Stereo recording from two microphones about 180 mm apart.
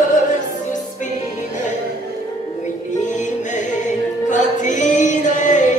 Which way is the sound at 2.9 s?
45° left (ahead or behind).